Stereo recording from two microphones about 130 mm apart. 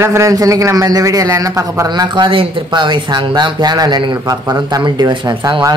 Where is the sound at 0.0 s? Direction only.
20° right (ahead or behind).